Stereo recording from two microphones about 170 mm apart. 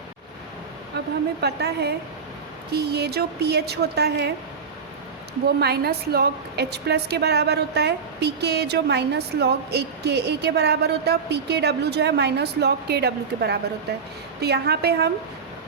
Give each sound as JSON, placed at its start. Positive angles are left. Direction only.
{"t": 0.9, "sound": "a sound", "side_deg": -80}
{"t": 1.4, "sound": "a woman's voice", "side_deg": -75}
{"t": 5.5, "sound": "a woman's voice", "side_deg": -70}